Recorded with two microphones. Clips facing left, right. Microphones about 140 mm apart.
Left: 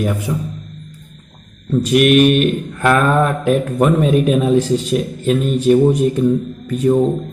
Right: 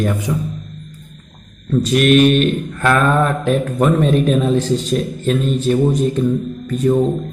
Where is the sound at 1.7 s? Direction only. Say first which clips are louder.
Left 1 dB; 10° left (ahead or behind).